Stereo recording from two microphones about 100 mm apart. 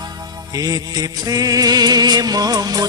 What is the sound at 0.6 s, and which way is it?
Music, 40° right (ahead or behind).